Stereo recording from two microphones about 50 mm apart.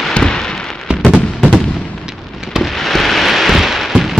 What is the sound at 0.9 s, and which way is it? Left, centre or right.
Fireworks, centre.